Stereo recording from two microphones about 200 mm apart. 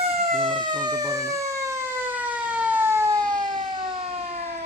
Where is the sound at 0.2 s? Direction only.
30° right (ahead or behind).